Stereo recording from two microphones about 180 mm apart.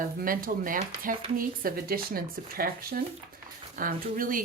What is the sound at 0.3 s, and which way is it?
Speech, 50° right (ahead or behind).